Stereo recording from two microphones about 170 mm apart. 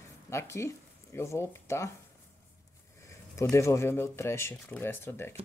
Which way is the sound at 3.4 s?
15° left (ahead or behind).